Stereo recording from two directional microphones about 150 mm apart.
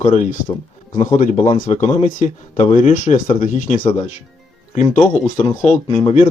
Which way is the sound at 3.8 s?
30° left (ahead or behind).